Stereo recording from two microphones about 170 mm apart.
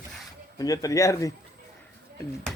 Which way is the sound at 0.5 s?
20° left (ahead or behind).